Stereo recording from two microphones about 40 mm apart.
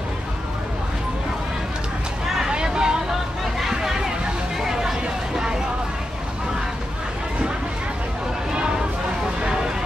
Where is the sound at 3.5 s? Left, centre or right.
Centre.